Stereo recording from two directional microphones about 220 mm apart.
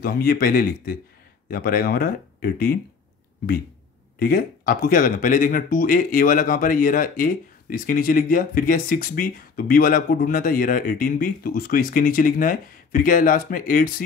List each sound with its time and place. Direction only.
0.0 s speech: 45° left (ahead or behind)
4.2 s speech: 40° left (ahead or behind)